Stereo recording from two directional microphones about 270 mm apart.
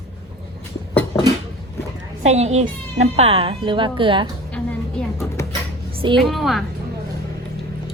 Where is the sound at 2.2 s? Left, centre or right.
Right.